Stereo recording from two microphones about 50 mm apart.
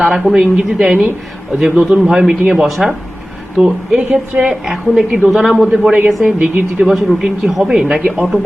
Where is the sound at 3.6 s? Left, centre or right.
Right.